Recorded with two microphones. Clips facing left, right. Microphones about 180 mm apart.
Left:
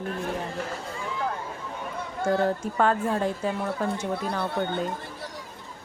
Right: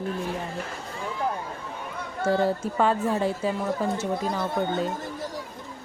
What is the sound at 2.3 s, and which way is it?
Speech, 10° right (ahead or behind).